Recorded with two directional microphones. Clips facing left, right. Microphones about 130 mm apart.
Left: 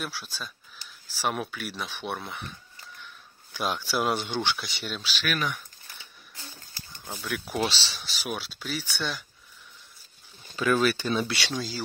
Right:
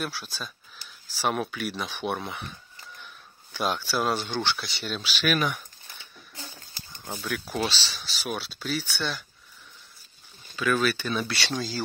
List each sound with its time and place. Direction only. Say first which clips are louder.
0.0 s speech: right 2 dB; 5° left (ahead or behind)
3.5 s speech: right 1 dB; 5° left (ahead or behind)
5.0 s speech: right 4 dB; 15° right (ahead or behind)
6.3 s a sound: right 3 dB; 20° right (ahead or behind)
7.1 s speech: right 1 dB; centre (ahead or behind)
10.5 s speech: left 1 dB; 25° left (ahead or behind)
11.2 s speech: even; 15° left (ahead or behind)